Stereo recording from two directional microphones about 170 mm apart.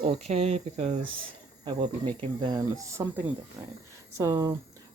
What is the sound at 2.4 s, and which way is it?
Speech, 25° right (ahead or behind).